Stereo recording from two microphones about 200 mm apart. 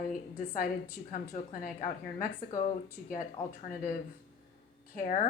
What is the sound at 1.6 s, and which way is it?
Speech, 45° left (ahead or behind).